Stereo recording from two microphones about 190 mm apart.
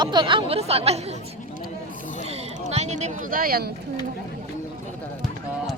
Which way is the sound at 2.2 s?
35° right (ahead or behind).